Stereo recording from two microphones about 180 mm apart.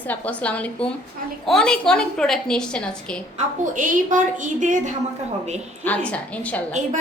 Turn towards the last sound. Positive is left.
turn(degrees=5)  # may be behind; listen again after turning